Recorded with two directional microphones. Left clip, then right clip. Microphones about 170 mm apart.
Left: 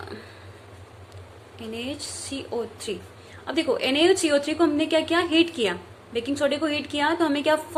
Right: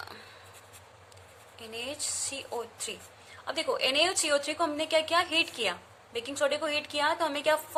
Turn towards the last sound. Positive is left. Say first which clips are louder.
# left 5 dB
turn(degrees=-20)  # may be behind; listen again after turning